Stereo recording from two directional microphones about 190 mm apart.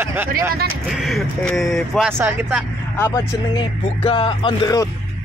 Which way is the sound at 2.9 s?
15° left (ahead or behind).